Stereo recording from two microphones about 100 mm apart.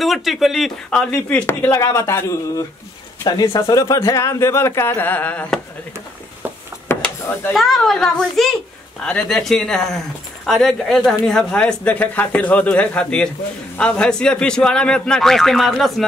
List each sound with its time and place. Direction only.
0.0 s speech: centre (ahead or behind)
1.4 s speech: 25° left (ahead or behind)
3.3 s speech: 45° left (ahead or behind); by 5.5 s 15° left (ahead or behind)
7.0 s a sound: 20° left (ahead or behind)
7.5 s speech: centre (ahead or behind)